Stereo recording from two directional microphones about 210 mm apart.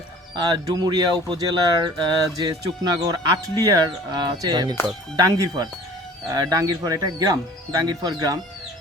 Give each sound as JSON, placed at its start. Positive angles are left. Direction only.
{"t": 0.3, "sound": "speech", "side_deg": -20}